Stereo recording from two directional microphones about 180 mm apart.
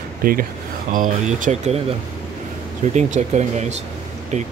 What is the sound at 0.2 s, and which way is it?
Speech, 55° right (ahead or behind).